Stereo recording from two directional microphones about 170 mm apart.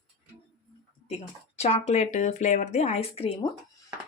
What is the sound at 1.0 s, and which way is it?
Speech, 40° left (ahead or behind).